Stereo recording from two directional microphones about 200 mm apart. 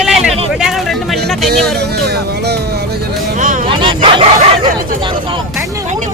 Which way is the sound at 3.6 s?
25° right (ahead or behind).